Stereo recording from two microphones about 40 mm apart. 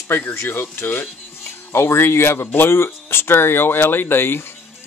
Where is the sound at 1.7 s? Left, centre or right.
Left.